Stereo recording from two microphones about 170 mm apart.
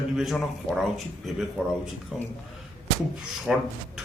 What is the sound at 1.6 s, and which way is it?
Speech, 5° right (ahead or behind).